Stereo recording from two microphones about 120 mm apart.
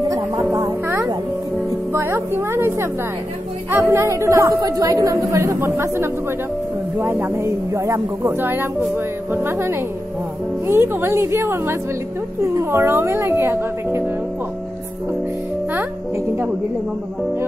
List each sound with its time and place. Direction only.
0.1 s music: 30° right (ahead or behind)
1.9 s a woman's voice: 20° right (ahead or behind)